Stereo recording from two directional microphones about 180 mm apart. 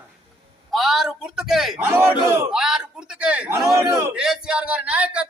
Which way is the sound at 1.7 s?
15° right (ahead or behind).